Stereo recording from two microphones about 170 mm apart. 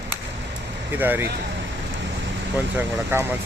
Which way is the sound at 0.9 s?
10° right (ahead or behind).